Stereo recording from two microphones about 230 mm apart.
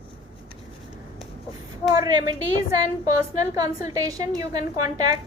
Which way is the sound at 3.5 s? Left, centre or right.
Centre.